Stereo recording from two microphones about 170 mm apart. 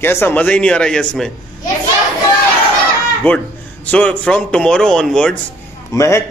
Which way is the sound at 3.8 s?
5° left (ahead or behind).